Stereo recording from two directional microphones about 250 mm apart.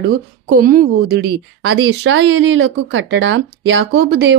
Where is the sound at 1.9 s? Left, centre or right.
Right.